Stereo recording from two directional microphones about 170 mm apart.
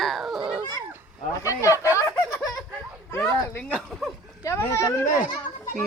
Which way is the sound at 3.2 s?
5° left (ahead or behind).